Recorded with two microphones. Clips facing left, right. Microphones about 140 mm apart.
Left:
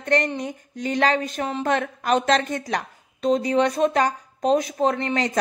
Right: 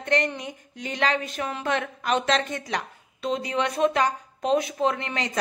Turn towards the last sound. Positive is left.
turn(degrees=40)  # may be behind; listen again after turning